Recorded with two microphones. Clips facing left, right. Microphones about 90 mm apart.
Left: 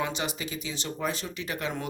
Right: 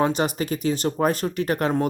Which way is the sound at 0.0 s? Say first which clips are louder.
Right 9 dB; 45° right (ahead or behind).